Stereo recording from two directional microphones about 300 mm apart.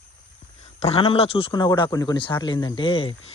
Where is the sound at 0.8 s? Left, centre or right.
Centre.